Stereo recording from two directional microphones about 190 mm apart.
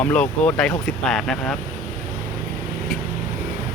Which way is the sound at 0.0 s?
5° left (ahead or behind).